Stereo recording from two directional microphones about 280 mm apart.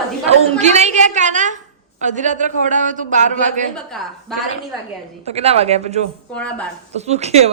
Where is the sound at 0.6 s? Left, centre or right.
Right.